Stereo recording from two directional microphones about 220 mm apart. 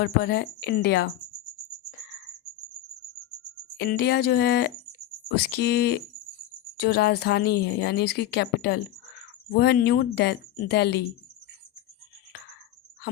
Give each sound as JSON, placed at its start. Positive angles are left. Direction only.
{"t": 0.0, "sound": "speech", "side_deg": 45}
{"t": 3.8, "sound": "speech", "side_deg": 50}